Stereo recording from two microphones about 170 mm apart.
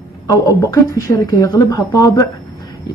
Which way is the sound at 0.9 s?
20° left (ahead or behind).